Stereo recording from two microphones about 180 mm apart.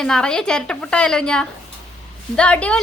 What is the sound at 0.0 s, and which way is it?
A woman's voice, 5° left (ahead or behind).